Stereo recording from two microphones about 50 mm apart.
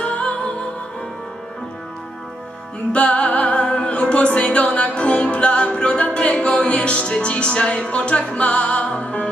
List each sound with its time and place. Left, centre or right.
0.0 s music: left
2.9 s music: left